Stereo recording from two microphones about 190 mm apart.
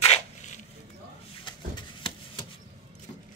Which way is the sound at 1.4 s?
25° left (ahead or behind).